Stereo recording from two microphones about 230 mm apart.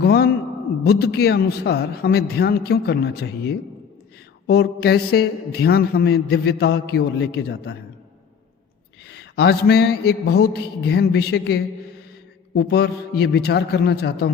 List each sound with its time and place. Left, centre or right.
0.0 s a man's voice: left
9.0 s a man's voice: left